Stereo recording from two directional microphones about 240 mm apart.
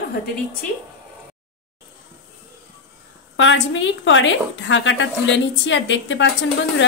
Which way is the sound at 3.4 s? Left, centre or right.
Left.